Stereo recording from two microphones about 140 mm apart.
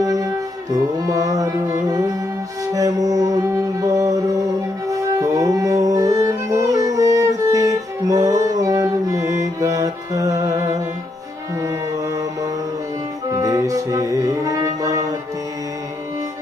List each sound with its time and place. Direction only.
0.0 s music: 25° right (ahead or behind)
2.7 s music: 25° right (ahead or behind)
13.3 s music: 25° right (ahead or behind)